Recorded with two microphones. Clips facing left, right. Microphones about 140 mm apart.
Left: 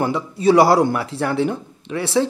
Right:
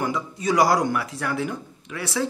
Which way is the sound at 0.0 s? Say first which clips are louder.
Left 8 dB; 30° left (ahead or behind).